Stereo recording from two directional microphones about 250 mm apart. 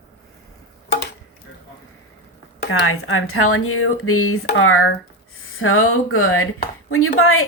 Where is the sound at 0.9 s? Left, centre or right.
Left.